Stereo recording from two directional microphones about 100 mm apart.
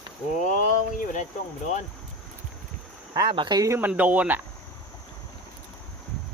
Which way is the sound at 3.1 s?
50° right (ahead or behind).